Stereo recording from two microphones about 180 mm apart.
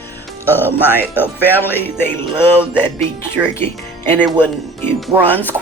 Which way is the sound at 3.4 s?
10° right (ahead or behind).